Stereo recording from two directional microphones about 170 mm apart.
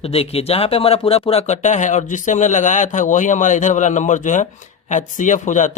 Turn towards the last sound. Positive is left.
turn(degrees=45)  # may be behind; listen again after turning